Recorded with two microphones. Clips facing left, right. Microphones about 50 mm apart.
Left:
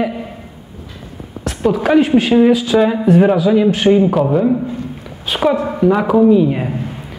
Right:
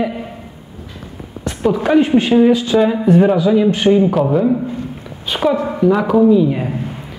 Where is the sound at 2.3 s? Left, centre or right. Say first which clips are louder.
Even; centre.